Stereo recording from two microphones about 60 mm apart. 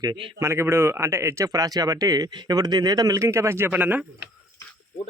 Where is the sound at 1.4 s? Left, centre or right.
Right.